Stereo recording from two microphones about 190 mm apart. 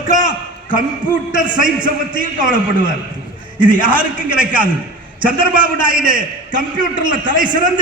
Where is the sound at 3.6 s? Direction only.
25° right (ahead or behind).